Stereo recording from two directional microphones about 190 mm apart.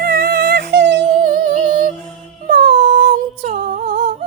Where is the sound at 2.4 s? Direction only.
55° right (ahead or behind).